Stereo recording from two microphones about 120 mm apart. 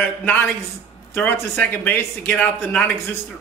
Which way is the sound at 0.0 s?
15° left (ahead or behind).